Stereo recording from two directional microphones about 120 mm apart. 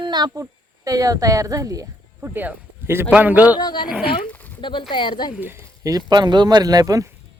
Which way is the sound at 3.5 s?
35° left (ahead or behind).